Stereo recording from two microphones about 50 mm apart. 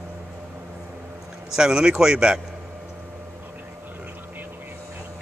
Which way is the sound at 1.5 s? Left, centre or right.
Centre.